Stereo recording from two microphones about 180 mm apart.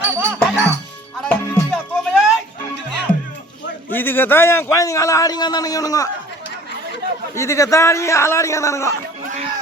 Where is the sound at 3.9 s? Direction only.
10° left (ahead or behind).